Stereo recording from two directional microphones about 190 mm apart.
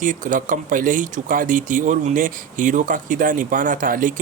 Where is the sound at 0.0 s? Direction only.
45° right (ahead or behind).